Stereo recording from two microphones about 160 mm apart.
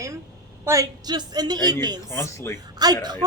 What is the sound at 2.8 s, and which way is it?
Speech, 25° right (ahead or behind).